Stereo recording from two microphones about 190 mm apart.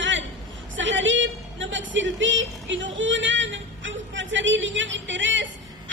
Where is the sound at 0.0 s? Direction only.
75° right (ahead or behind).